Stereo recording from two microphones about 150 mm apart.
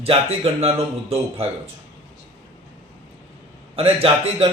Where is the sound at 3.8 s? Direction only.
40° right (ahead or behind).